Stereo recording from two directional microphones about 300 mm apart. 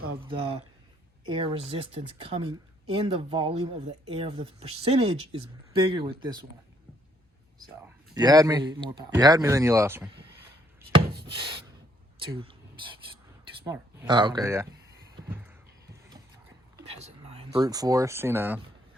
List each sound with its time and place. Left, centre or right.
0.3 s speech: centre
8.1 s speech: centre
10.8 s wood: centre
12.2 s speech: centre
13.7 s speech: centre
16.8 s speech: centre